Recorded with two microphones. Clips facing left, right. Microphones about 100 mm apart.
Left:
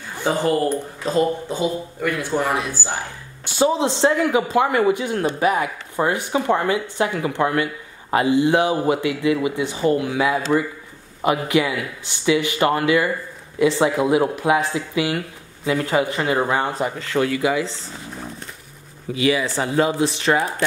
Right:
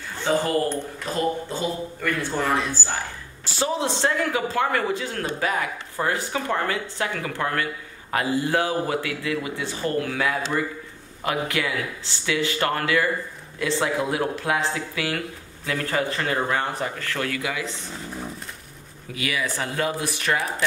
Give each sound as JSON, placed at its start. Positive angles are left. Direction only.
{"t": 0.1, "sound": "a woman's voice", "side_deg": 15}
{"t": 19.1, "sound": "speech", "side_deg": 25}